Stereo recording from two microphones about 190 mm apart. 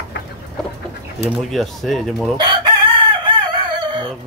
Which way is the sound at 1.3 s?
Centre (ahead or behind).